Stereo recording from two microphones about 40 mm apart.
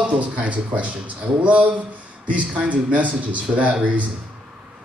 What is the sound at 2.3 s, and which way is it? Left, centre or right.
Speech, right.